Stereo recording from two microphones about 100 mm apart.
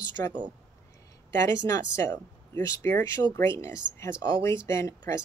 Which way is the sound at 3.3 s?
30° left (ahead or behind).